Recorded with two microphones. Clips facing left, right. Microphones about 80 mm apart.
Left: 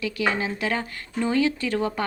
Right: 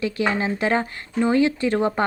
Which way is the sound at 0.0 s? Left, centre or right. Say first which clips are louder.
Right 3 dB; right.